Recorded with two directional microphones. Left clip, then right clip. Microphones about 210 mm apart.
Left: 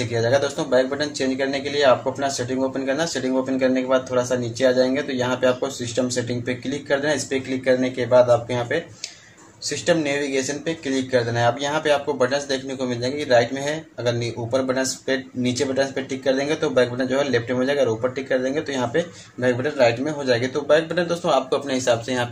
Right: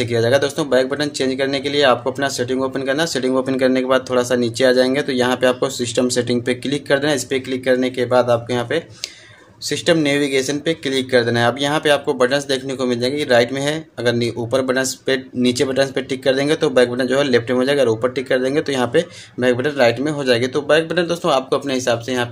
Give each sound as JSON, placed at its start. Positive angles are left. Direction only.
{"t": 0.0, "sound": "speech", "side_deg": -35}